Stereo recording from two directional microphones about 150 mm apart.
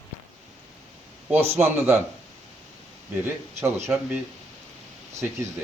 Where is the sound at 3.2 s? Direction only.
15° right (ahead or behind).